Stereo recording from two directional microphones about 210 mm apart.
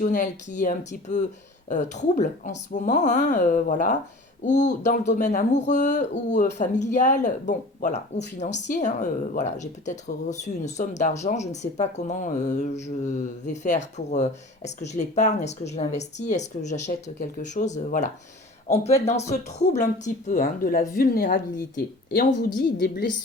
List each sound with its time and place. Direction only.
0.0 s a woman's voice: 35° left (ahead or behind)